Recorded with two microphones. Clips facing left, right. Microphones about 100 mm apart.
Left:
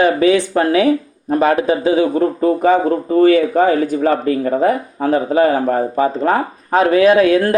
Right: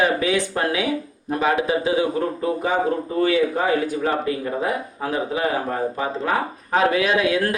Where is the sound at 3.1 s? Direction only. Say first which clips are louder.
Left 9 dB; 50° left (ahead or behind).